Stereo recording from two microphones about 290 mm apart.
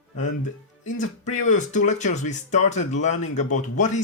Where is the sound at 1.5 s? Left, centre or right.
Left.